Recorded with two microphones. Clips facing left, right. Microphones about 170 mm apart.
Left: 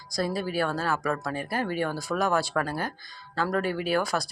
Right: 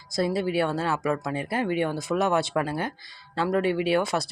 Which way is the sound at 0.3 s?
25° right (ahead or behind).